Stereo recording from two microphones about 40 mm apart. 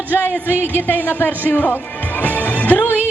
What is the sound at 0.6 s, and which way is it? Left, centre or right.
Speech, left.